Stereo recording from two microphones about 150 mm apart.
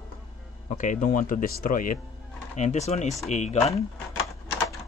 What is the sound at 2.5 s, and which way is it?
Speech, 50° left (ahead or behind).